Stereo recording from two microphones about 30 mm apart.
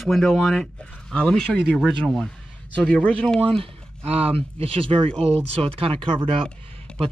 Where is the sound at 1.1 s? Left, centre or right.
Left.